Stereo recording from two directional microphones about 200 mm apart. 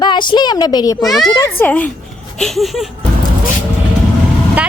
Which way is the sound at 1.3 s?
15° left (ahead or behind).